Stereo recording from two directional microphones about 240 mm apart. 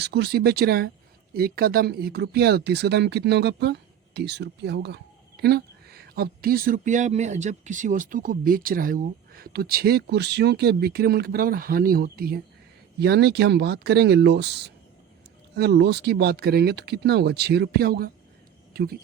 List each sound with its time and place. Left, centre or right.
0.0 s speech: right